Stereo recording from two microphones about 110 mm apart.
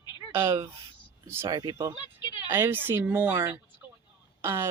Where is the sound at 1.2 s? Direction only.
25° right (ahead or behind).